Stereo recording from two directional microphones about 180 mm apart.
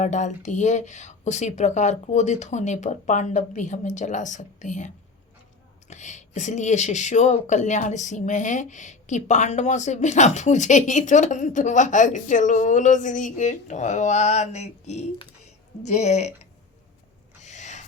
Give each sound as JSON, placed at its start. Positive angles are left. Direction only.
{"t": 0.0, "sound": "speech", "side_deg": 40}
{"t": 5.9, "sound": "speech", "side_deg": 40}
{"t": 17.4, "sound": "a sound", "side_deg": 40}